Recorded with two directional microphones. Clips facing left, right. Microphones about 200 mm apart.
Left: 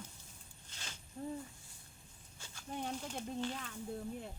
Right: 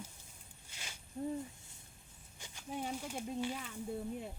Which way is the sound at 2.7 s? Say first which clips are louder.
Right 1 dB; 5° right (ahead or behind).